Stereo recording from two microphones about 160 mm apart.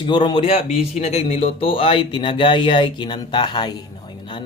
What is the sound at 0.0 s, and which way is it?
Speech, 30° left (ahead or behind).